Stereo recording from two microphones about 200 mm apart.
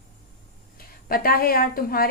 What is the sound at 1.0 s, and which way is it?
A woman's voice, 45° left (ahead or behind).